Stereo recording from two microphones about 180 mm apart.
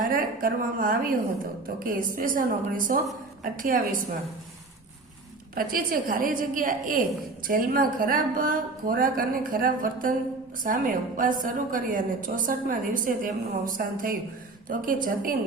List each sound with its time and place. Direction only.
0.0 s a woman's voice: 50° right (ahead or behind)
5.5 s a woman's voice: 50° right (ahead or behind)